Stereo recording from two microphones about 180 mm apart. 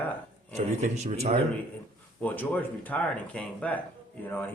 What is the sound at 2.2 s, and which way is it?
Speech, 10° left (ahead or behind).